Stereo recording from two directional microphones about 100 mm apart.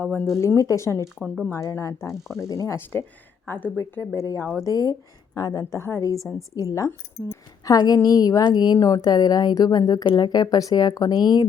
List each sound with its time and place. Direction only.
0.0 s speech: 20° left (ahead or behind)
0.4 s a woman's voice: 35° left (ahead or behind)
2.2 s speech: 5° right (ahead or behind)
2.6 s a woman's voice: 25° left (ahead or behind); by 5.6 s 40° left (ahead or behind)
5.7 s a woman's voice: 25° left (ahead or behind); by 11.4 s 45° left (ahead or behind)